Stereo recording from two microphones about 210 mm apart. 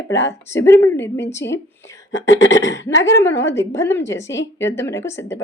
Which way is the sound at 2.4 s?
60° left (ahead or behind).